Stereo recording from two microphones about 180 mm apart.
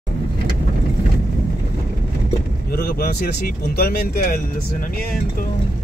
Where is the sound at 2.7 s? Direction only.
60° left (ahead or behind).